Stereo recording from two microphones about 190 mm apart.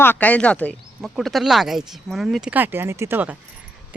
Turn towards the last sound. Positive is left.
turn(degrees=-10)  # may be behind; listen again after turning